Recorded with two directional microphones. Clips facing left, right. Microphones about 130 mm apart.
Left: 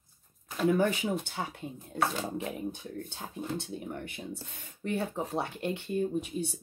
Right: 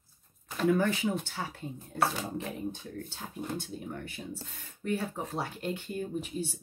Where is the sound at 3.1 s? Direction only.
20° left (ahead or behind).